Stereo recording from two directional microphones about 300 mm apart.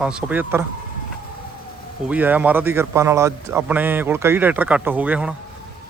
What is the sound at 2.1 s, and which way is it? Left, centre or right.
A man's voice, centre.